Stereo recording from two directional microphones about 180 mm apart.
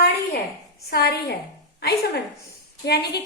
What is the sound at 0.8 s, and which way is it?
Speech, 60° left (ahead or behind).